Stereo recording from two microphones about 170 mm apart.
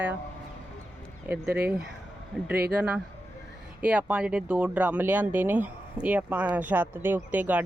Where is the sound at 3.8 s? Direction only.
5° right (ahead or behind).